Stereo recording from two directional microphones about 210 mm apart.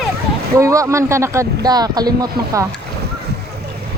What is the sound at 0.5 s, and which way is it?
Speech, 15° right (ahead or behind).